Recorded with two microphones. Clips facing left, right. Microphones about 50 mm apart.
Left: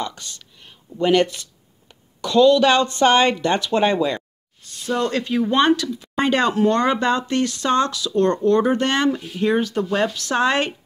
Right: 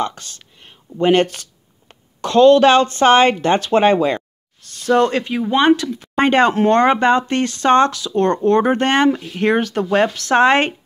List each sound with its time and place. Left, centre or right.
0.4 s a sound: right
1.9 s speech: right
4.6 s a sound: right
5.1 s speech: right
5.4 s speech: centre
5.9 s speech: right
9.3 s speech: right